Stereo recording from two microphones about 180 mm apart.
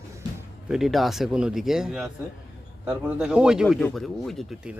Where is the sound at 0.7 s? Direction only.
Centre (ahead or behind).